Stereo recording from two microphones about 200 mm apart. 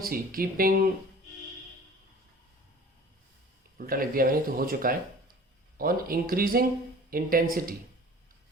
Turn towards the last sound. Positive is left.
turn(degrees=-45)  # may be behind; listen again after turning